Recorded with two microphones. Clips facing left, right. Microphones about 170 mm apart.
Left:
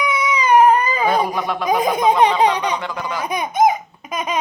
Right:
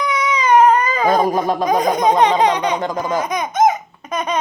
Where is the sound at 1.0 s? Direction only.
40° right (ahead or behind).